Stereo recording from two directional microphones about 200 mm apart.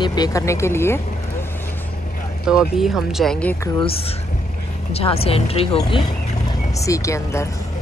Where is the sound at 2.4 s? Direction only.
Centre (ahead or behind).